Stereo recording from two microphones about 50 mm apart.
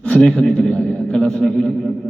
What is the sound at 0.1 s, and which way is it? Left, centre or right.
A man's voice, centre.